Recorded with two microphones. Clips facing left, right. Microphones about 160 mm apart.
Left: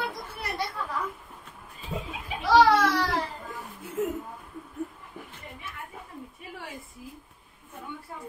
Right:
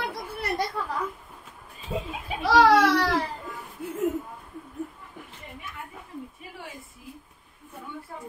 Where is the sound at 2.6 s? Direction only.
80° right.